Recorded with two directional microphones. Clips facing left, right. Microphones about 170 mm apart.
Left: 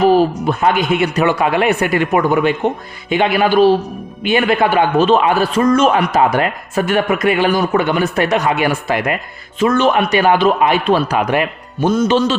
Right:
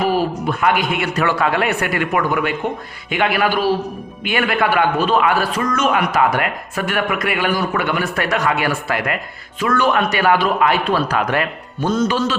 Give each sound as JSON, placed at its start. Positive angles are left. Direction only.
{"t": 0.4, "sound": "a man's voice", "side_deg": 25}
{"t": 12.0, "sound": "a man's voice", "side_deg": 25}